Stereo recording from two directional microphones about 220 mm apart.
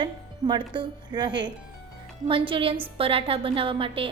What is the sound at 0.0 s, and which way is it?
Speech, 20° right (ahead or behind).